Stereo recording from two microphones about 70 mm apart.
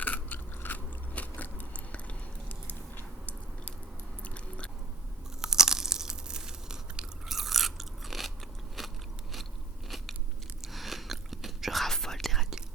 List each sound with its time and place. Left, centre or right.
0.0 s biting: left
5.4 s crunch: centre
8.8 s biting: centre
10.6 s whispering: centre